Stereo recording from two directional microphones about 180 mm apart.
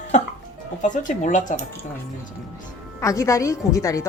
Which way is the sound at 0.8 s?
45° left (ahead or behind).